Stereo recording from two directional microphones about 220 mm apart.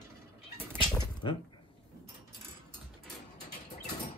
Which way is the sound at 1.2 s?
25° left (ahead or behind).